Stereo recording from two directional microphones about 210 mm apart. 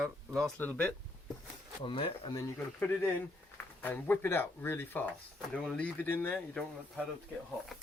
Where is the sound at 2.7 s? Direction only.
10° left (ahead or behind).